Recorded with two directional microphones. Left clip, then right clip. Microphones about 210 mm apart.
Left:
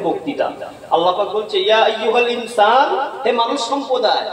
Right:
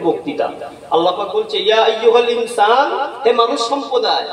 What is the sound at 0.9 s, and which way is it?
A man's voice, 55° right (ahead or behind).